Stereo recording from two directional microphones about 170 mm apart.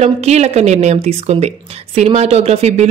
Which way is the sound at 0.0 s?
40° right (ahead or behind).